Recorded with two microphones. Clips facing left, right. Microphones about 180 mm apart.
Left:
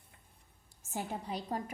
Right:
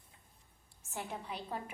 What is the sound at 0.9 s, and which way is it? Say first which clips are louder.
Speech: left 4 dB; 40° left (ahead or behind).